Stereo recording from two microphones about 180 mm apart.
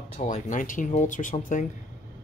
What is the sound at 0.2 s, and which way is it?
Speech, 45° left (ahead or behind).